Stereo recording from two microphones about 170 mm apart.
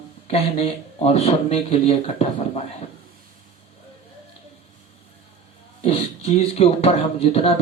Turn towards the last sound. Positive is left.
turn(degrees=35)  # may be behind; listen again after turning